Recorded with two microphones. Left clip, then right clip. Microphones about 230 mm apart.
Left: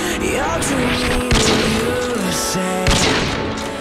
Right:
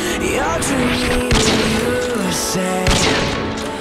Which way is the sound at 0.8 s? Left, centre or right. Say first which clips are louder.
Right 1 dB; centre.